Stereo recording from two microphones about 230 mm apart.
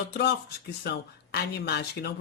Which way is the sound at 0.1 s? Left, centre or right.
Left.